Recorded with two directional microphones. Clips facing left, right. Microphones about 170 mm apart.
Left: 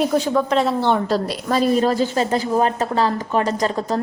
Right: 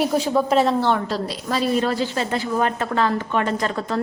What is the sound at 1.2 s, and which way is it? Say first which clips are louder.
A woman's voice: left 4 dB; 45° left (ahead or behind).